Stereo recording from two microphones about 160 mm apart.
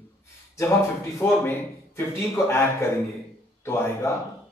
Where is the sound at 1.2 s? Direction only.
15° left (ahead or behind).